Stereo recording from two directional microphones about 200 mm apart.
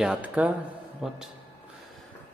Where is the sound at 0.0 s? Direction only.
5° right (ahead or behind).